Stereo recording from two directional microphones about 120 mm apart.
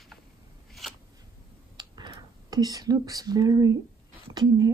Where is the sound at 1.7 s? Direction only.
40° right (ahead or behind).